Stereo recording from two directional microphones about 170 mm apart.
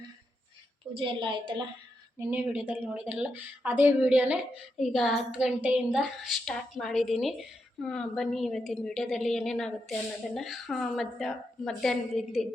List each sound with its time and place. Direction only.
0.9 s a woman's voice: 30° right (ahead or behind)
2.1 s a woman's voice: 10° right (ahead or behind)